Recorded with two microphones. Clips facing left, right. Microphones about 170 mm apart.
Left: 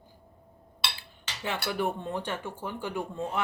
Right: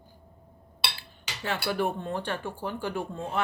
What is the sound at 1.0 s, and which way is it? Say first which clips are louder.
Cutlery: right 1 dB; 20° left (ahead or behind).